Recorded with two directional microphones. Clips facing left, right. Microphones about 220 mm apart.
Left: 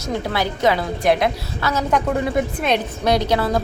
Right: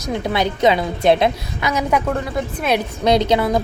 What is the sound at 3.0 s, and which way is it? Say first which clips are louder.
Speech: right 4 dB; 20° right (ahead or behind).